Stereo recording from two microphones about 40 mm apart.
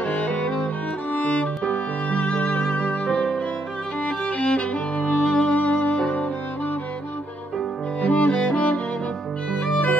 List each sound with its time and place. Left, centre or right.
0.0 s cello: left
1.1 s music: left
3.1 s music: centre
4.0 s music: left
5.2 s music: left
5.5 s music: left
5.9 s music: left
8.0 s music: left
9.6 s music: left